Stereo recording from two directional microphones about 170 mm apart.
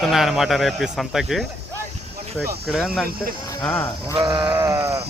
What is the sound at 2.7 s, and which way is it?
Speech, centre (ahead or behind).